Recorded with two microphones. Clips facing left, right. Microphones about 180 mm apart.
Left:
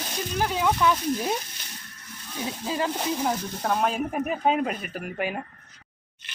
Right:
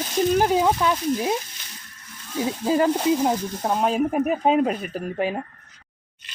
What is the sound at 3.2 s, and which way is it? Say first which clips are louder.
Speech: right 4 dB; 20° right (ahead or behind).